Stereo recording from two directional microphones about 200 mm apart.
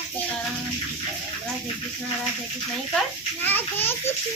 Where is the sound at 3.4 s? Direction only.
10° left (ahead or behind).